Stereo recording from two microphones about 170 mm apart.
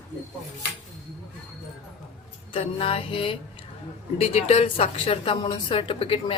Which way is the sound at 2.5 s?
35° left (ahead or behind).